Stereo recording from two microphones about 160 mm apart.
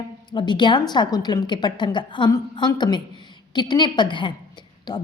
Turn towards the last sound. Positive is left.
turn(degrees=25)  # may be behind; listen again after turning